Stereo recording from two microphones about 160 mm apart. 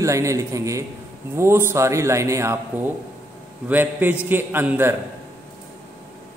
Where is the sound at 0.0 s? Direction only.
20° right (ahead or behind).